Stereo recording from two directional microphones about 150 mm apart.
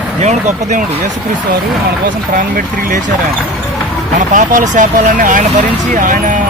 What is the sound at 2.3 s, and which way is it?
Speech, 65° right (ahead or behind).